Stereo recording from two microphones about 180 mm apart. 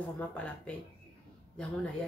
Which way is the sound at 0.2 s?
5° left (ahead or behind).